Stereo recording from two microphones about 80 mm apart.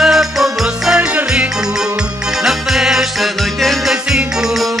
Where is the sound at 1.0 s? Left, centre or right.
Centre.